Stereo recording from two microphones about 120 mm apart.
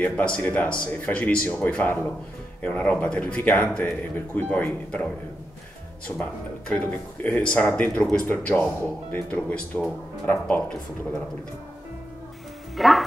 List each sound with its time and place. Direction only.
0.0 s speech: 10° left (ahead or behind)
6.1 s speech: 45° left (ahead or behind)
6.7 s speech: 10° left (ahead or behind)
12.7 s speech: centre (ahead or behind)